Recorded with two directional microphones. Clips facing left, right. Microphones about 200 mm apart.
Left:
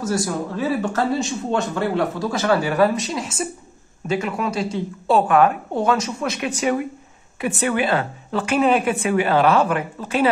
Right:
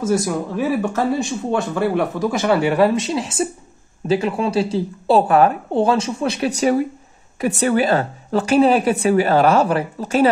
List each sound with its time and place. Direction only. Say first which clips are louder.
0.0 s speech: right 3 dB; 15° right (ahead or behind)
2.6 s a woman's voice: right 3 dB; 25° right (ahead or behind)